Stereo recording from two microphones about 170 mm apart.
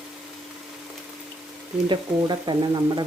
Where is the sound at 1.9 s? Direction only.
25° right (ahead or behind).